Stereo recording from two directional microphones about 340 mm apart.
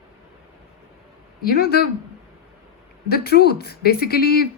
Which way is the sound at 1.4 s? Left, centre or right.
Left.